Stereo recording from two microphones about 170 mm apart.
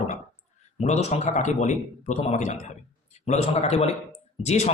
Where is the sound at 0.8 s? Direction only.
45° left (ahead or behind).